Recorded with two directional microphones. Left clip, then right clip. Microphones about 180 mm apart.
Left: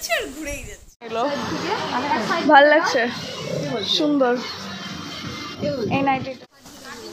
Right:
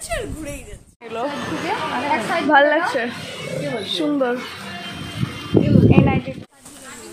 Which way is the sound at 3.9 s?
5° right (ahead or behind).